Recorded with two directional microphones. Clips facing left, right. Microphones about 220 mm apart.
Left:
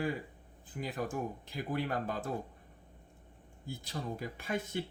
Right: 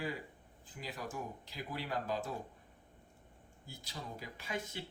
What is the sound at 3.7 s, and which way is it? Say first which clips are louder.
Speech: left 8 dB; 55° left (ahead or behind).